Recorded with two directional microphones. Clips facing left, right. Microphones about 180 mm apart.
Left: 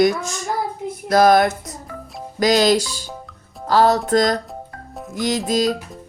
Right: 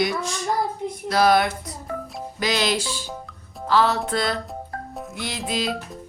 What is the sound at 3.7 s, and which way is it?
Speech, 40° left (ahead or behind).